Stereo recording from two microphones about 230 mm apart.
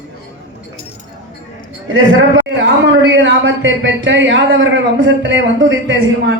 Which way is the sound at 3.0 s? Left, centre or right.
Right.